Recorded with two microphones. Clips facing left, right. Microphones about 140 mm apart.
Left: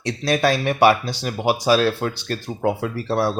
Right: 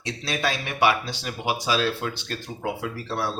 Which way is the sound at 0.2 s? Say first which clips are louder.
Left 9 dB; 40° left (ahead or behind).